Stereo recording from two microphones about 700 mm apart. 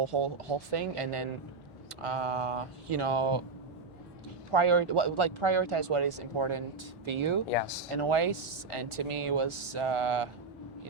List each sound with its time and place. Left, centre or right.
0.0 s speech: right
4.5 s speech: right
7.5 s speech: left
7.9 s speech: right